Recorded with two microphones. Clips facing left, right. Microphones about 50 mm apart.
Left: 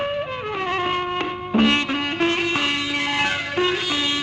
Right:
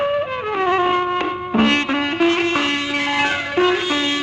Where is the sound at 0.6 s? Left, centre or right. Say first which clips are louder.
Right 7 dB; right; by 4.1 s centre.